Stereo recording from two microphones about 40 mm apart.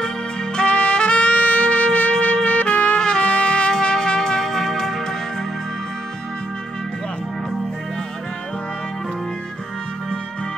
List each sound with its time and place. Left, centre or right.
0.6 s music: left